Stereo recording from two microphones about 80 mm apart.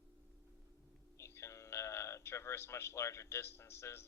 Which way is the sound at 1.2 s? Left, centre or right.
Left.